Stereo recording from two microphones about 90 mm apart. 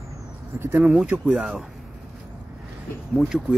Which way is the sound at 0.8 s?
5° right (ahead or behind).